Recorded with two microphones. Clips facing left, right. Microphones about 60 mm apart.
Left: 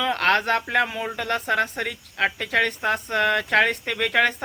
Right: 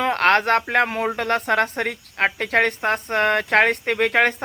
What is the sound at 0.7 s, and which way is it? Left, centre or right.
Speech, right.